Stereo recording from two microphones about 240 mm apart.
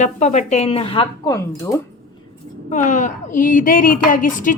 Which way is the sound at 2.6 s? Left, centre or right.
Left.